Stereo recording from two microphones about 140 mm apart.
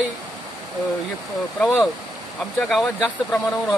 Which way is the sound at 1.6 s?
Centre (ahead or behind).